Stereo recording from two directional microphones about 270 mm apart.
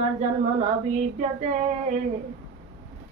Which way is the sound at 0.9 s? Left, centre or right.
Right.